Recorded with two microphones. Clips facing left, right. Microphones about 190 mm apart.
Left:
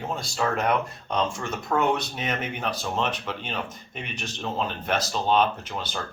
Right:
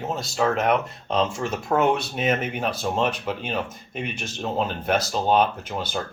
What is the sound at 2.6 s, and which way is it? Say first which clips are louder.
Speech: right 4 dB; 45° right (ahead or behind).